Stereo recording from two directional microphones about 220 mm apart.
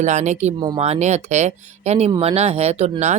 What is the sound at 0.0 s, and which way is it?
Speech, 35° right (ahead or behind).